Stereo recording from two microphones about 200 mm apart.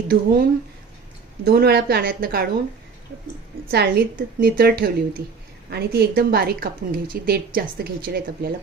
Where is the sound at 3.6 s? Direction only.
50° right (ahead or behind).